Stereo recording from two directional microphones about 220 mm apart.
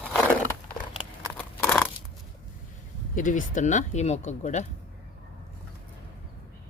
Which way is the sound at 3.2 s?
35° left (ahead or behind).